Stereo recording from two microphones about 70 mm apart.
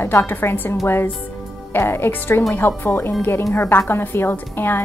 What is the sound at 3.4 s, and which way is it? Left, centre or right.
Speech, left.